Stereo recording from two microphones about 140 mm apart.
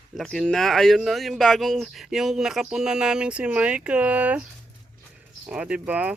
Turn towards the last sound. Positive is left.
turn(degrees=-10)  # may be behind; listen again after turning